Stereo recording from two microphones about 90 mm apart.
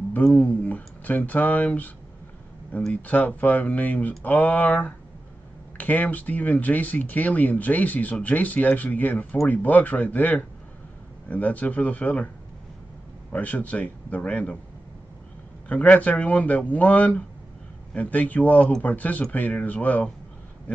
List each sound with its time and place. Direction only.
0.1 s speech: 15° left (ahead or behind)
2.9 s speech: 20° left (ahead or behind)
13.3 s speech: 15° left (ahead or behind)
15.7 s speech: 15° left (ahead or behind)